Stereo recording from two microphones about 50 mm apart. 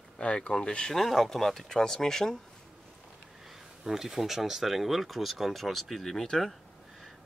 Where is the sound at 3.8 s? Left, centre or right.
Centre.